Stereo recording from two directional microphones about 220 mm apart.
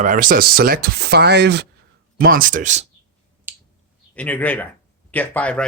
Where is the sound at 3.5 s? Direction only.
10° right (ahead or behind).